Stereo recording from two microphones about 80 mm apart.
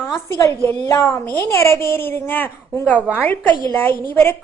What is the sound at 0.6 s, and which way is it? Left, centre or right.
A child's voice, left.